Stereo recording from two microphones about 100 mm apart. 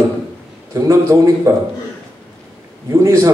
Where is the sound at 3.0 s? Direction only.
30° right (ahead or behind).